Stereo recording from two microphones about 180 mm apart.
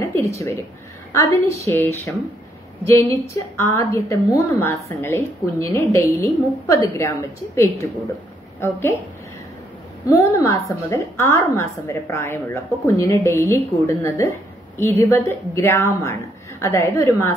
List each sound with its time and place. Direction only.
0.0 s a woman's voice: 15° left (ahead or behind)
10.0 s a woman's voice: 15° left (ahead or behind)